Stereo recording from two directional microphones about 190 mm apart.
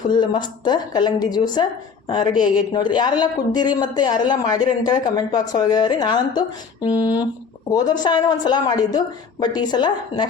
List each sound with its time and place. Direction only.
0.1 s speech: 25° left (ahead or behind)